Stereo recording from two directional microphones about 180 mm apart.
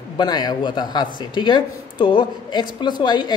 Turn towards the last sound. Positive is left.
turn(degrees=25)  # may be behind; listen again after turning